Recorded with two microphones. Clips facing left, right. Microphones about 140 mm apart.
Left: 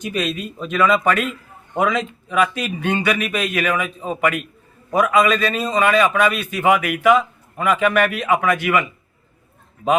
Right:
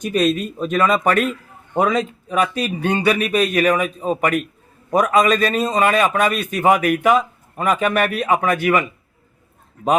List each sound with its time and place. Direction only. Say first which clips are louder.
0.0 s a man's voice: right 6 dB; 40° right (ahead or behind)